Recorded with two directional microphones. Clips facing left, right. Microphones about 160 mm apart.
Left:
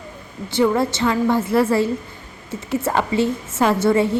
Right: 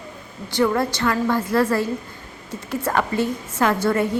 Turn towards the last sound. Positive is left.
turn(degrees=25)  # may be behind; listen again after turning